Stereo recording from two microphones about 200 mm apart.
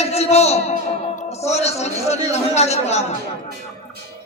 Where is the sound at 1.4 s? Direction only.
30° left (ahead or behind).